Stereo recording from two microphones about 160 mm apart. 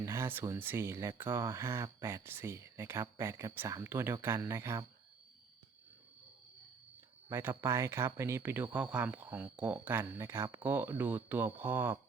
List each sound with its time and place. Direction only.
0.0 s speech: 15° right (ahead or behind)
7.3 s speech: 15° right (ahead or behind)